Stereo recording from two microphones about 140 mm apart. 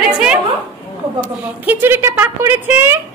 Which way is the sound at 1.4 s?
15° right (ahead or behind).